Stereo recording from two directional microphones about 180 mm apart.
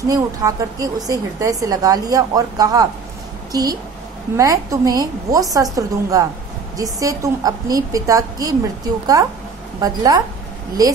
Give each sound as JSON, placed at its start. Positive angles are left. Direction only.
{"t": 0.1, "sound": "a woman's voice", "side_deg": -20}